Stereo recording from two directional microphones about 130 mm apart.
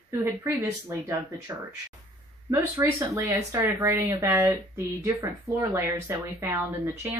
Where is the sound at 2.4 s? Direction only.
20° right (ahead or behind).